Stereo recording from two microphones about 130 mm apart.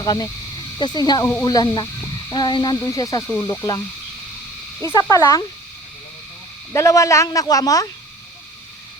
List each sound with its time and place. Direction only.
0.0 s speech: 30° left (ahead or behind)
4.8 s speech: 20° left (ahead or behind)
6.7 s speech: 25° left (ahead or behind)